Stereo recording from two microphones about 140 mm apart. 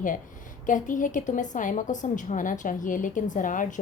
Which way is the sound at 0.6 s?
65° left (ahead or behind).